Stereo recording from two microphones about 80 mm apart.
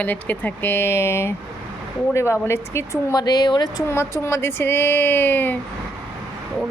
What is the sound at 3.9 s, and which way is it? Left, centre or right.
Speech, left.